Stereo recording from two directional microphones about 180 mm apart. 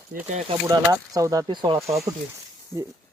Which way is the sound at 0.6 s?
20° right (ahead or behind).